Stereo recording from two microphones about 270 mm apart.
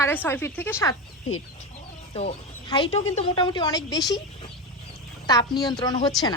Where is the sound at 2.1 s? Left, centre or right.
Centre.